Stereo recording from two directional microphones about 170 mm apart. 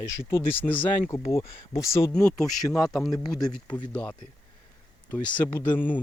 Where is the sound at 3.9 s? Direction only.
10° left (ahead or behind).